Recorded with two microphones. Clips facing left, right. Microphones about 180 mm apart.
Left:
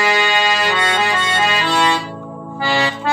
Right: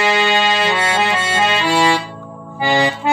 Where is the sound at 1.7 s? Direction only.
10° right (ahead or behind).